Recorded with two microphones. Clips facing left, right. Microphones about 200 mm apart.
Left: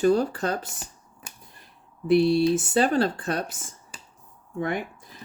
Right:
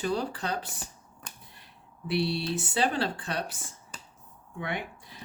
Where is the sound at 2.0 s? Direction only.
45° left (ahead or behind).